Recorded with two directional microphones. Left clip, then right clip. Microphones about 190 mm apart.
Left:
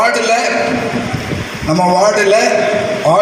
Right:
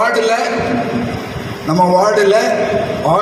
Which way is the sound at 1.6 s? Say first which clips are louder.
Even; 45° left (ahead or behind).